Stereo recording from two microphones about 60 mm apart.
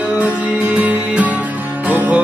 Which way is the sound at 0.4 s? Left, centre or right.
Right.